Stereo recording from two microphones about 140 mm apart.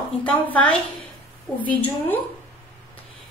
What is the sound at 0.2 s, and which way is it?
Speech, 10° left (ahead or behind).